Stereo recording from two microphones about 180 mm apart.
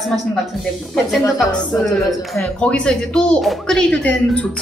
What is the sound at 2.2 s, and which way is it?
Speech, centre (ahead or behind).